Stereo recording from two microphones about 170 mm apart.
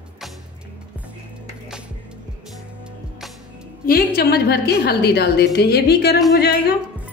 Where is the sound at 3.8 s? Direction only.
65° left (ahead or behind).